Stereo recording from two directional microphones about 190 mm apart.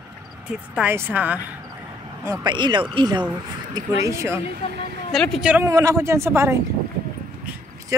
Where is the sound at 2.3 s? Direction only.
25° right (ahead or behind).